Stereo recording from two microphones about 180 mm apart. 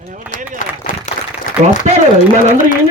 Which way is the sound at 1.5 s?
45° left (ahead or behind).